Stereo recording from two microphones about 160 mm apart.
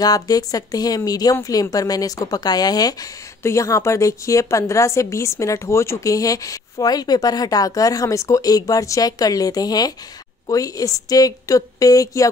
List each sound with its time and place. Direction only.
0.0 s a woman's voice: 25° left (ahead or behind)